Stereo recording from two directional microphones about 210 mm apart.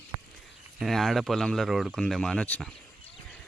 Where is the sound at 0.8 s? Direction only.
Centre (ahead or behind).